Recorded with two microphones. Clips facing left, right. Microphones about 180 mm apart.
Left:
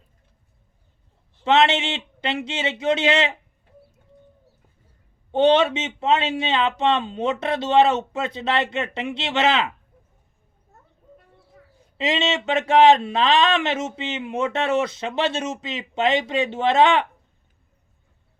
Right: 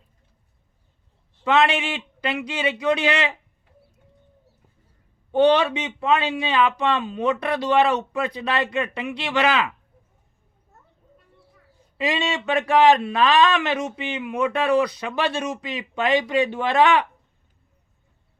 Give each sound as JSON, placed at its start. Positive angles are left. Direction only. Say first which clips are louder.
{"t": 1.5, "sound": "speech", "louder": "left 1 dB", "side_deg": 25}
{"t": 5.3, "sound": "speech", "louder": "even", "side_deg": 25}
{"t": 11.9, "sound": "speech", "louder": "left 1 dB", "side_deg": 20}